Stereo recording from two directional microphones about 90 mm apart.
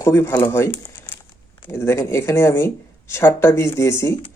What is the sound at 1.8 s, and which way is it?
Speech, 30° left (ahead or behind).